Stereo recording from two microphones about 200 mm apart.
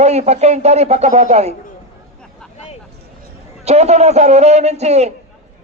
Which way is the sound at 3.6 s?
35° right (ahead or behind).